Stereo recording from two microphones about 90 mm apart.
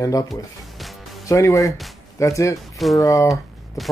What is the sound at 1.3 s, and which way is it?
Speech, 35° left (ahead or behind).